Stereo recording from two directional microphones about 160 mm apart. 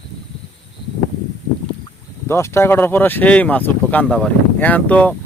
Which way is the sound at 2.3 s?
15° left (ahead or behind).